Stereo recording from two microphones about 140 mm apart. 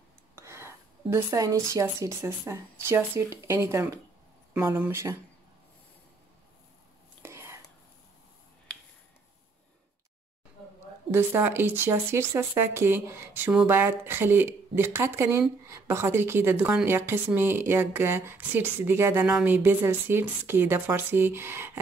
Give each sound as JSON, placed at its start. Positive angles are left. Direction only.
{"t": 0.4, "sound": "speech", "side_deg": -20}
{"t": 7.2, "sound": "whispering", "side_deg": -20}
{"t": 11.1, "sound": "speech", "side_deg": -15}